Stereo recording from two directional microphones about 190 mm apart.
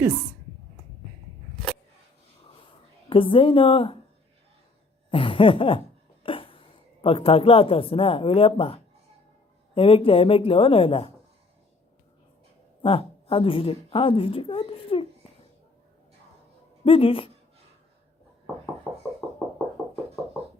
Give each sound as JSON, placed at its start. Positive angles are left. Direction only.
{"t": 3.1, "sound": "speech", "side_deg": 30}
{"t": 5.1, "sound": "a sound", "side_deg": 30}
{"t": 7.0, "sound": "speech", "side_deg": 30}
{"t": 12.8, "sound": "a woman's voice", "side_deg": 30}
{"t": 16.8, "sound": "speech", "side_deg": 30}
{"t": 18.9, "sound": "knock", "side_deg": 0}